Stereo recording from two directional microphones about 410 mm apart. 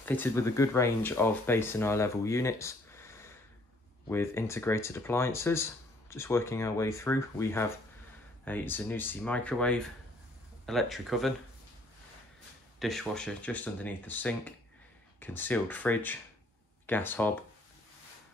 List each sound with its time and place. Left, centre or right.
0.0 s speech: centre
12.7 s speech: centre